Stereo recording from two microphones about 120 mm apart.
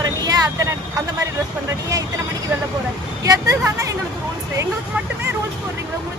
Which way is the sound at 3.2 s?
25° right (ahead or behind).